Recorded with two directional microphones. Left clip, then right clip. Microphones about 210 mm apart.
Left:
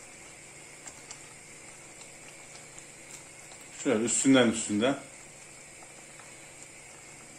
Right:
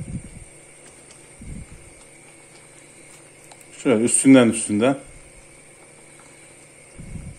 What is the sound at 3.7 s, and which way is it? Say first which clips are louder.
Speech: right 9 dB; 40° right (ahead or behind).